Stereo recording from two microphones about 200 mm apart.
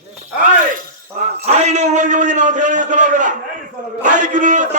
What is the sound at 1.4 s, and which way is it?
A man's voice, 35° right (ahead or behind).